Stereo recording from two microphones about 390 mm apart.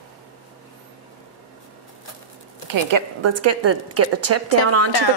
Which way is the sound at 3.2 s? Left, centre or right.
Right.